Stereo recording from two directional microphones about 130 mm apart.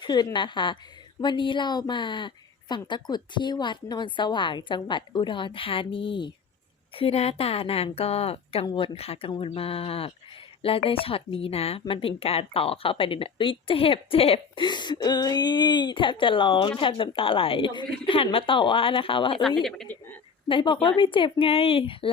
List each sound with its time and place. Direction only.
0.0 s a woman's voice: 35° left (ahead or behind)
6.9 s speech: 50° left (ahead or behind)
19.9 s speech: 10° left (ahead or behind)
20.5 s a woman's voice: 40° left (ahead or behind)